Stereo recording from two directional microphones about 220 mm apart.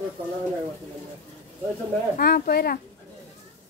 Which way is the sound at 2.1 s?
40° left (ahead or behind).